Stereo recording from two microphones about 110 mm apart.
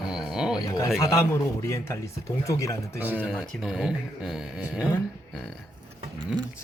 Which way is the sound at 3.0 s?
15° right (ahead or behind).